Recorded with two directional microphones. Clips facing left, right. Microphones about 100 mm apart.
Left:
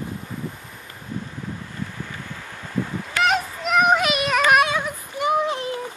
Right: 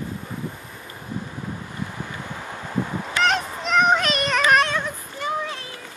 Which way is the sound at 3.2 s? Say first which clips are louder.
Left 2 dB; 5° left (ahead or behind).